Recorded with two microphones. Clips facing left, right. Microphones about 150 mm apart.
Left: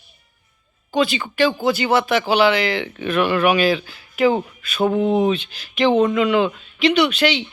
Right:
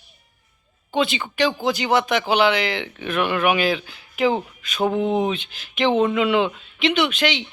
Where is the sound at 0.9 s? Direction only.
20° right (ahead or behind).